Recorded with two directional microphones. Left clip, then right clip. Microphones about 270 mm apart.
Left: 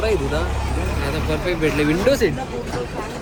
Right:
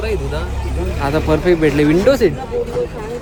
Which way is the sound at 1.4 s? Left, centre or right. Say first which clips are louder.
Right 4 dB; right.